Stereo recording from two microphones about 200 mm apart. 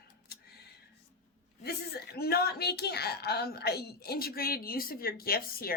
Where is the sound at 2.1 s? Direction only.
50° left (ahead or behind).